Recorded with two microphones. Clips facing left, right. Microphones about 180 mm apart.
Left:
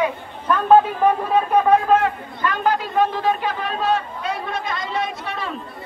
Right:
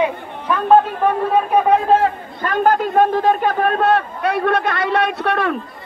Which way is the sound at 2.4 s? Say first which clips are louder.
Right 5 dB; 50° right (ahead or behind).